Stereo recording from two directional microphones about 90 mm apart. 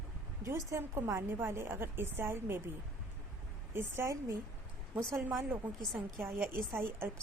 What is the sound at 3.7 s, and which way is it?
Speech, 25° right (ahead or behind).